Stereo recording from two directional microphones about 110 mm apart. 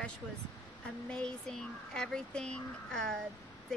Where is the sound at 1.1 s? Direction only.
5° left (ahead or behind).